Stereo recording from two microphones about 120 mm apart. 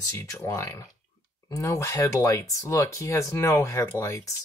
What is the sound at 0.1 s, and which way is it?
Speech, 20° left (ahead or behind).